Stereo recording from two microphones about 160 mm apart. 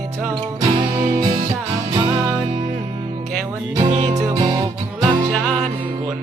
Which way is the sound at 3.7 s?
30° right (ahead or behind).